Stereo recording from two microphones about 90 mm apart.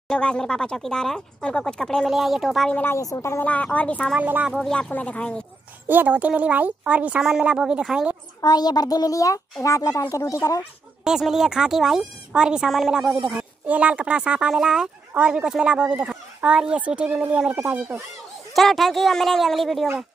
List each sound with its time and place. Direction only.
0.1 s speech: 10° left (ahead or behind)
2.7 s speech: 25° left (ahead or behind)
3.0 s speech: 35° left (ahead or behind)
3.4 s speech: 15° left (ahead or behind)
4.2 s speech: 20° right (ahead or behind)
4.5 s speech: 5° left (ahead or behind)
5.9 s speech: 20° right (ahead or behind)
8.4 s a child's voice: 50° left (ahead or behind)
11.1 s speech: 5° right (ahead or behind)
18.5 s speech: centre (ahead or behind)